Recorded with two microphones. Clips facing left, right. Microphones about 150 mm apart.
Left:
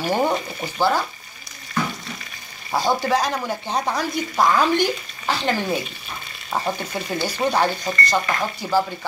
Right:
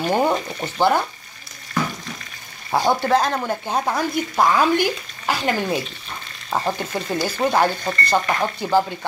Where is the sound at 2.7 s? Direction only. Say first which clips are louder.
Right 2 dB; 15° right (ahead or behind).